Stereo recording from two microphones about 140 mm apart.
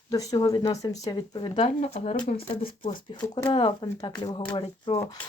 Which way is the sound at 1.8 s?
50° left (ahead or behind).